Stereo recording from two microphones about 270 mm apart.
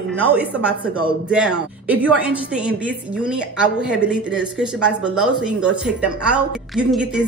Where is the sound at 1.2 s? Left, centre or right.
Centre.